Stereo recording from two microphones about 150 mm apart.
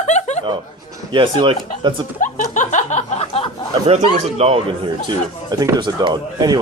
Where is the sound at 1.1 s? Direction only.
30° right (ahead or behind).